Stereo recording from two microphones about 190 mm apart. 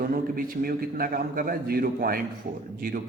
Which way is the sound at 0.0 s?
50° right (ahead or behind).